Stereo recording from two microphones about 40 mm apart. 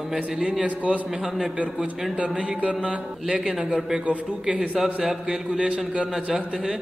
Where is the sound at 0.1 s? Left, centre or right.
Centre.